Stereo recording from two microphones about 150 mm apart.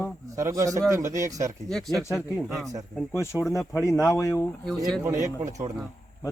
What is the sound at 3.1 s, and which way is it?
Speech, 20° left (ahead or behind).